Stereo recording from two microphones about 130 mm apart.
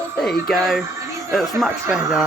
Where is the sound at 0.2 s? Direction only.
5° left (ahead or behind).